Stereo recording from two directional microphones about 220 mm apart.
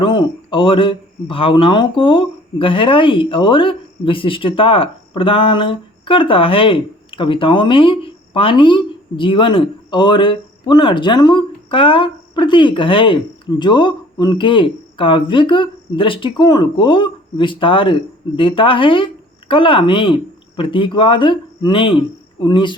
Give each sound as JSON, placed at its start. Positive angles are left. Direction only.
{"t": 0.0, "sound": "a man's voice", "side_deg": 20}